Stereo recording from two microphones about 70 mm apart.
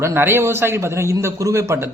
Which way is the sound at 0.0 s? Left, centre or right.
Right.